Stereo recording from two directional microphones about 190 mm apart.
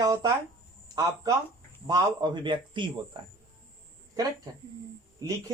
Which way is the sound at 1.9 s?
25° right (ahead or behind).